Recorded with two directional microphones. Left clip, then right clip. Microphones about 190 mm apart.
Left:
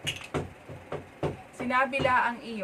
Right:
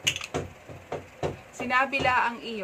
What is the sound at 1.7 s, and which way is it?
Speech, 15° right (ahead or behind).